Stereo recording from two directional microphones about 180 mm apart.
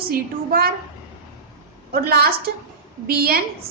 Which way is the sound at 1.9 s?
55° right (ahead or behind).